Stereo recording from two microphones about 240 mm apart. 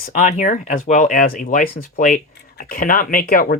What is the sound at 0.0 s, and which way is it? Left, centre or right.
Speech, left.